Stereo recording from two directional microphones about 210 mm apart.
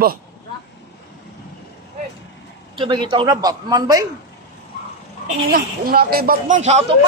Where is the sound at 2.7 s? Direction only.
20° right (ahead or behind).